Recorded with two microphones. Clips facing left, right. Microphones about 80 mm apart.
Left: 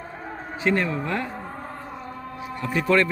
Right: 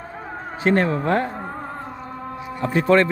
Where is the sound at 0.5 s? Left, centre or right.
Right.